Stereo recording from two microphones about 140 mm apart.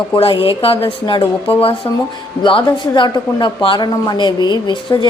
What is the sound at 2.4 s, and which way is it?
A woman's voice, 35° left (ahead or behind).